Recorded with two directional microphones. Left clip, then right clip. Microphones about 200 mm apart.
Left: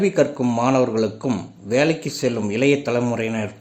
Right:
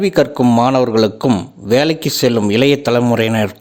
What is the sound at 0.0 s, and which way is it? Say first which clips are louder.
A man's voice: right 5 dB; 45° right (ahead or behind).